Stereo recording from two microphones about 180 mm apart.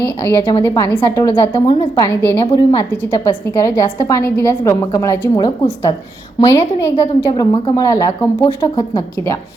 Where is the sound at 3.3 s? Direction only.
20° left (ahead or behind).